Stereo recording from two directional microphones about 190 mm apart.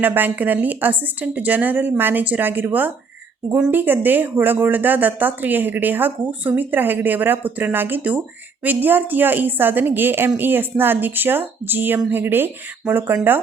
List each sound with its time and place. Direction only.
0.0 s a woman's voice: 10° right (ahead or behind)